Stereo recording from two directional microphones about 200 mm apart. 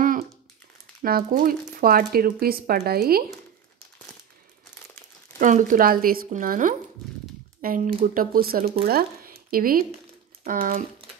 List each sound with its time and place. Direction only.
0.0 s crumpling: 45° right (ahead or behind)
1.0 s speech: 45° right (ahead or behind)
5.4 s speech: 40° right (ahead or behind)